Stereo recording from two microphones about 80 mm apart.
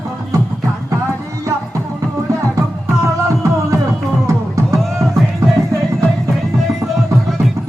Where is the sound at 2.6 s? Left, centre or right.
Right.